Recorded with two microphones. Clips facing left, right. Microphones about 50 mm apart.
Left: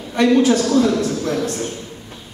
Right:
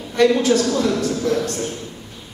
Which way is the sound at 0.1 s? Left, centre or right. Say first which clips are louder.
Left 1 dB; centre.